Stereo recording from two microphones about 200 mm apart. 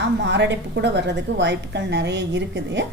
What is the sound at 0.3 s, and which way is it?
A woman's voice, 60° right (ahead or behind).